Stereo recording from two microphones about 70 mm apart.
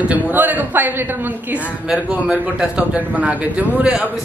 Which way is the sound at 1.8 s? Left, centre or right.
Centre.